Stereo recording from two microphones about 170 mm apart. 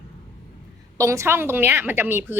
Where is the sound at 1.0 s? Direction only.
15° right (ahead or behind).